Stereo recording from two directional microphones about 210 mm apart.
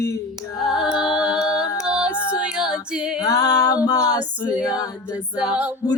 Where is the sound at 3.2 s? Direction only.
15° left (ahead or behind).